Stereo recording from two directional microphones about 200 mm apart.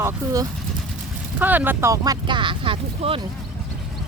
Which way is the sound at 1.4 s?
10° right (ahead or behind).